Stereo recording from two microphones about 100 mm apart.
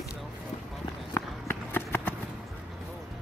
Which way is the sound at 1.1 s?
25° left (ahead or behind).